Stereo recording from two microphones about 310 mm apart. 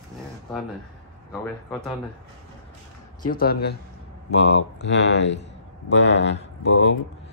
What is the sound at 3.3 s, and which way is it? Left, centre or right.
Mantra, left.